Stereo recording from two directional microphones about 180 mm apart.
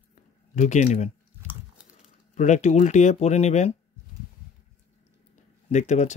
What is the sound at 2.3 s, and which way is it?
Speech, 40° left (ahead or behind).